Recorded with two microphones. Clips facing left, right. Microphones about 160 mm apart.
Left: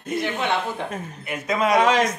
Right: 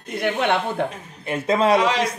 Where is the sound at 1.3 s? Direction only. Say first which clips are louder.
Right 4 dB; 30° right (ahead or behind).